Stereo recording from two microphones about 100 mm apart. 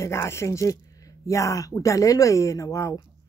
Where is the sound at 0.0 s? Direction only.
30° left (ahead or behind).